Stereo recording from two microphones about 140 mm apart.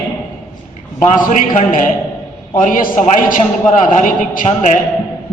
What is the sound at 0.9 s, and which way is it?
A man's voice, 65° left (ahead or behind).